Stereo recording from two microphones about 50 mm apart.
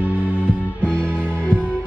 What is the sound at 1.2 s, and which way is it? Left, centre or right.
Music, left.